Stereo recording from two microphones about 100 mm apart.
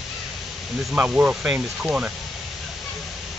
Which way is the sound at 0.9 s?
15° right (ahead or behind).